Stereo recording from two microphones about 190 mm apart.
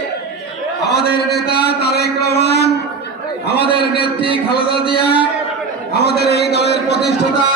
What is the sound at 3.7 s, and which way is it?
Speech, 25° right (ahead or behind).